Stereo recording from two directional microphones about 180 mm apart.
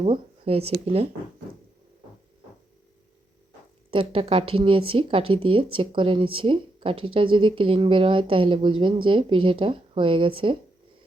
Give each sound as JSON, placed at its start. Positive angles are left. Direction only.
{"t": 0.0, "sound": "speech", "side_deg": -30}
{"t": 3.9, "sound": "speech", "side_deg": -30}